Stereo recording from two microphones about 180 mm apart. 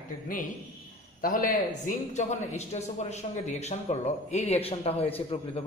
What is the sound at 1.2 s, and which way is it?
A man's voice, 50° left (ahead or behind).